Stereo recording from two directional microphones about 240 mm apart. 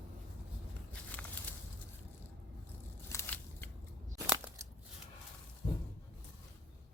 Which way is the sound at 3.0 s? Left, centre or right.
Centre.